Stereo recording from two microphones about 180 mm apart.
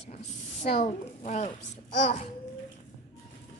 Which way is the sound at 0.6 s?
45° left (ahead or behind).